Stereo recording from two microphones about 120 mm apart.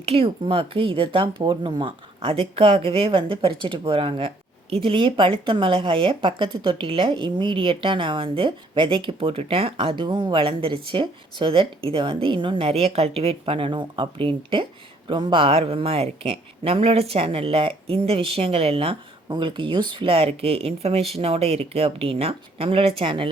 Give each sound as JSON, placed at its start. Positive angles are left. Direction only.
{"t": 0.0, "sound": "speech", "side_deg": -50}